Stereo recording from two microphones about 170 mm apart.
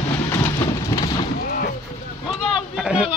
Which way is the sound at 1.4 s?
55° left (ahead or behind).